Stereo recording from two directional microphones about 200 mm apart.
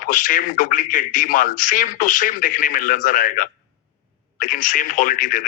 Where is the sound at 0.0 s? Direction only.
40° left (ahead or behind).